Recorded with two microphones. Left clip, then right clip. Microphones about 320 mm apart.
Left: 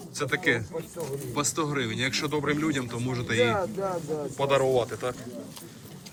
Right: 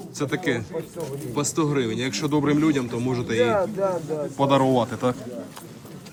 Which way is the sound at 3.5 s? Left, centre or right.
Centre.